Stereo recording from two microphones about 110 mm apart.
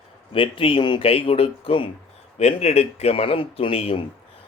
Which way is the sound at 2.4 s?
75° left (ahead or behind).